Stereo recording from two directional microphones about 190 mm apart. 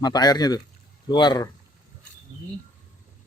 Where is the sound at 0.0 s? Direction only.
20° left (ahead or behind).